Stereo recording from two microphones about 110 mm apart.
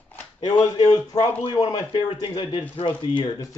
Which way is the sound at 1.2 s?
60° left (ahead or behind).